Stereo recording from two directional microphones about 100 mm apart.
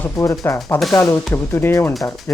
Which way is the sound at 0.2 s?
25° left (ahead or behind).